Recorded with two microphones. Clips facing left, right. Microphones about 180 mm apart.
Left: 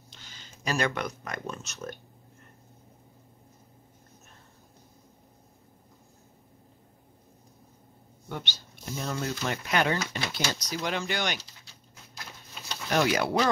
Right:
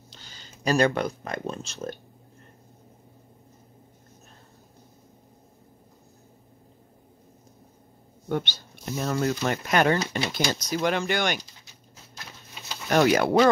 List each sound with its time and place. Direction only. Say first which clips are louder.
0.1 s speech: right 1 dB; 35° right (ahead or behind)
8.3 s speech: right 10 dB; 50° right (ahead or behind)
12.9 s speech: right 6 dB; 50° right (ahead or behind)